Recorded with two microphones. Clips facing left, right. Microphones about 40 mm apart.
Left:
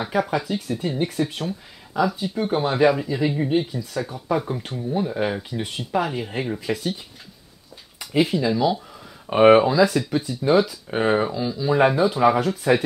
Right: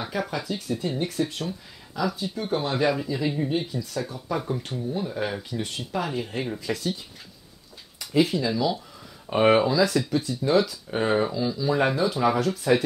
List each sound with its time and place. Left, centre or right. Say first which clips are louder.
0.0 s speech: left 6 dB; centre
2.0 s speech: left 5 dB; left
3.7 s speech: left 2 dB; centre
8.0 s speech: left 2 dB; left